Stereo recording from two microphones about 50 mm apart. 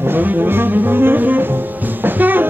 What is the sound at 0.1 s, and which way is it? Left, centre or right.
Music, right.